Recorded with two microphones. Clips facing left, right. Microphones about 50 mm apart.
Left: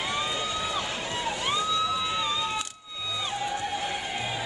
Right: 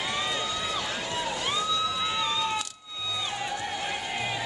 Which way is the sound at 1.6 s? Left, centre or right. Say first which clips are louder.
Left 2 dB; left.